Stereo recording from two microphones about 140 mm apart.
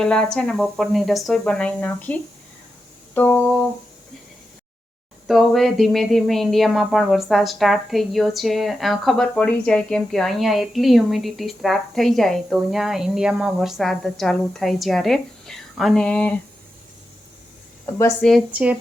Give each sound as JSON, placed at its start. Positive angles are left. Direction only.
{"t": 0.0, "sound": "speech", "side_deg": 5}
{"t": 5.3, "sound": "speech", "side_deg": 0}
{"t": 17.8, "sound": "speech", "side_deg": 20}
{"t": 18.2, "sound": "speech", "side_deg": 0}